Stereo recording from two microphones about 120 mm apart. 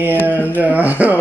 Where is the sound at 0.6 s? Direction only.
15° right (ahead or behind).